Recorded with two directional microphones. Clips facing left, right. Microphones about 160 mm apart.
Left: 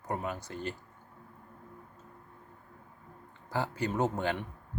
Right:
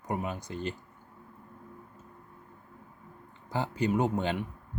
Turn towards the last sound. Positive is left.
turn(degrees=-15)  # may be behind; listen again after turning